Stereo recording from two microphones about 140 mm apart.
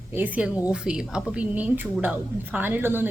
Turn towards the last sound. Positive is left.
turn(degrees=-15)  # may be behind; listen again after turning